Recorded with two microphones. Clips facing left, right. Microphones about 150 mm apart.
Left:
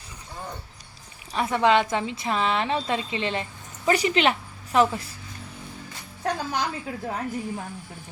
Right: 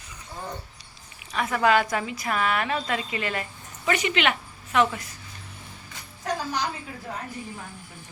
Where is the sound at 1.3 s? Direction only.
30° left (ahead or behind).